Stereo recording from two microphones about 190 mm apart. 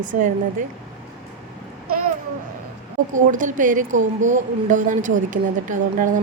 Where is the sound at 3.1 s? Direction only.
40° right (ahead or behind).